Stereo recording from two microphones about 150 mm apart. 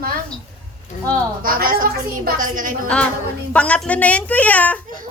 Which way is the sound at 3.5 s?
10° left (ahead or behind).